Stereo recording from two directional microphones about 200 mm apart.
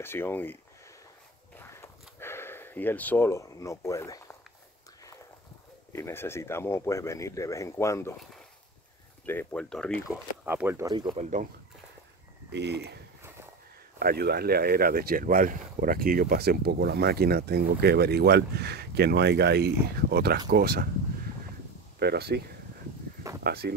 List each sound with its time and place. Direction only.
0.0 s speech: 10° left (ahead or behind)
1.6 s a sound: 15° left (ahead or behind)
5.9 s speech: 10° left (ahead or behind)
9.2 s speech: 10° left (ahead or behind)
10.4 s speech: 10° right (ahead or behind)
11.1 s speech: 40° right (ahead or behind)
12.4 s speech: 55° right (ahead or behind)
22.0 s speech: 55° right (ahead or behind)
23.4 s speech: 50° right (ahead or behind)